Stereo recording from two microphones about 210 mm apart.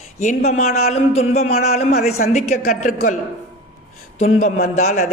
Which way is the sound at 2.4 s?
90° left.